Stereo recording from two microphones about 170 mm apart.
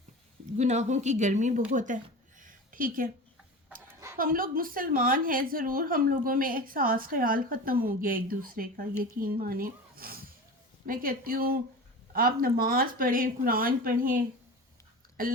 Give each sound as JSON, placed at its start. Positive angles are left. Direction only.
{"t": 0.5, "sound": "speech", "side_deg": -45}
{"t": 2.4, "sound": "a sound", "side_deg": -55}
{"t": 4.2, "sound": "a woman's voice", "side_deg": -55}
{"t": 15.2, "sound": "a woman's voice", "side_deg": -60}